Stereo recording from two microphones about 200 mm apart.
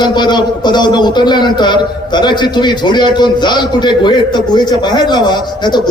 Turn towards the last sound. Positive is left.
turn(degrees=20)  # may be behind; listen again after turning